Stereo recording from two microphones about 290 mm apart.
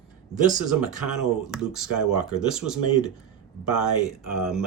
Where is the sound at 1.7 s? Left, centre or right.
Centre.